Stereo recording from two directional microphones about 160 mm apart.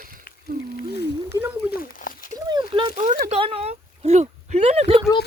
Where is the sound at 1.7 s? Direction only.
65° left (ahead or behind).